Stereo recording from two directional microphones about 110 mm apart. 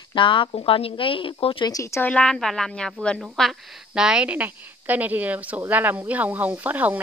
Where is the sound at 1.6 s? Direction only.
30° left (ahead or behind).